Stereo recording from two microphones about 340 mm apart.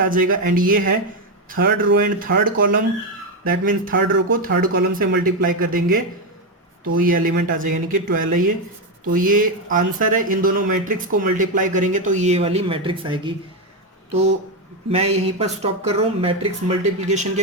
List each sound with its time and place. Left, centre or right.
0.1 s speech: right
14.8 s speech: centre